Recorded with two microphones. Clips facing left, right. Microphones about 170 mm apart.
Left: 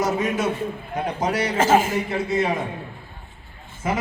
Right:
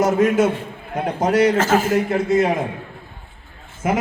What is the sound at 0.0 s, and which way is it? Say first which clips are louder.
A man's voice: right 6 dB; 50° right (ahead or behind).